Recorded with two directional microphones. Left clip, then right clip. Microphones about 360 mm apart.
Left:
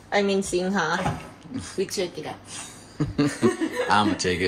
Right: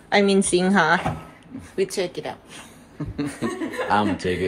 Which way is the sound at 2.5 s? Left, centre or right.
Centre.